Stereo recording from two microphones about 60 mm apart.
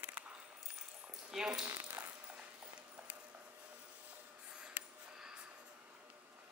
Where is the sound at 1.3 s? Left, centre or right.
Centre.